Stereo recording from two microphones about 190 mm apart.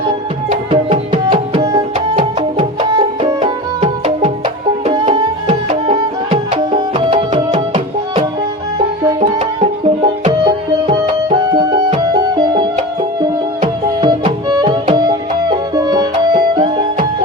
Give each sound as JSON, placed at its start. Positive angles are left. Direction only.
{"t": 0.7, "sound": "music", "side_deg": -40}
{"t": 1.3, "sound": "music", "side_deg": -20}
{"t": 3.4, "sound": "music", "side_deg": -35}
{"t": 4.4, "sound": "music", "side_deg": -25}
{"t": 9.4, "sound": "music", "side_deg": -30}